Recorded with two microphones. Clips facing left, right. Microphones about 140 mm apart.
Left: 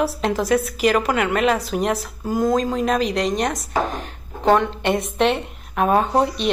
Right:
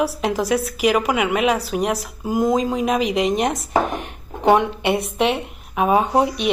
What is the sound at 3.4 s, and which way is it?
A woman's voice, 25° right (ahead or behind).